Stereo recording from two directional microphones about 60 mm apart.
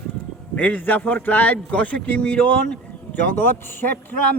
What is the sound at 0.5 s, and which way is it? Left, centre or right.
A man's voice, left.